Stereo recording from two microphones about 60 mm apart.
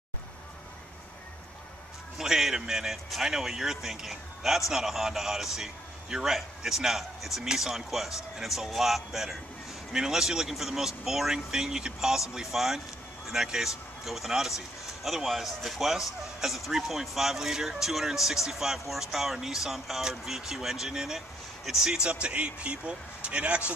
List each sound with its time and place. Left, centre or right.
2.1 s a man's voice: centre